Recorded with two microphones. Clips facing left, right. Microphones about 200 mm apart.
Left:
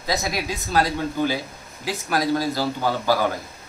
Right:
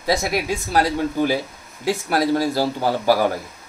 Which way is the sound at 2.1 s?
30° right (ahead or behind).